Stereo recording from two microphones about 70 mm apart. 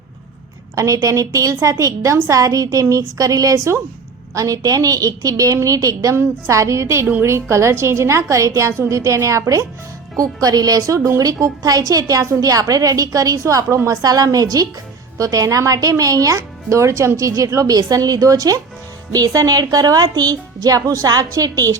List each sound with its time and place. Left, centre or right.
0.8 s a woman's voice: right
10.2 s a woman's voice: right